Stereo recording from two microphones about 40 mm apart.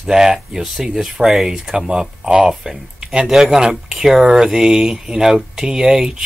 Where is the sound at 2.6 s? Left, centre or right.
Centre.